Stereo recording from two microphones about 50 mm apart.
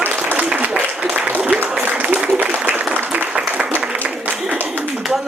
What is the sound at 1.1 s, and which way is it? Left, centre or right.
Applause, right.